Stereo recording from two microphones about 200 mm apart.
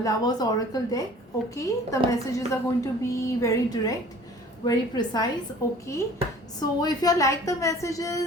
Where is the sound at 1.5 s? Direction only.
15° left (ahead or behind).